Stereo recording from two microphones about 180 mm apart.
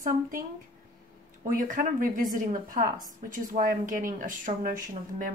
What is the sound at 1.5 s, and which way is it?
A woman's voice, 50° right (ahead or behind).